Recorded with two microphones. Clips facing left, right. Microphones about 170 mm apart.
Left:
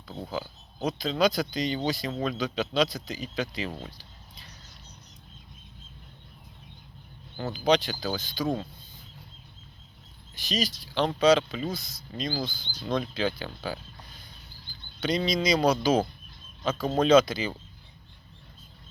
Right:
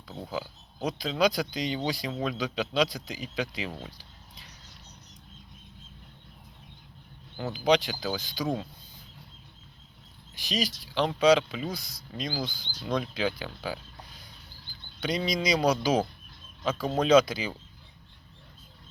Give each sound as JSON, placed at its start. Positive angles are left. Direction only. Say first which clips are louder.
{"t": 0.1, "sound": "speech", "louder": "left 1 dB", "side_deg": -5}
{"t": 3.8, "sound": "a sound", "louder": "left 1 dB", "side_deg": -10}
{"t": 7.3, "sound": "speech", "louder": "even", "side_deg": -5}
{"t": 10.4, "sound": "speech", "louder": "left 1 dB", "side_deg": -10}
{"t": 15.0, "sound": "speech", "louder": "left 2 dB", "side_deg": -10}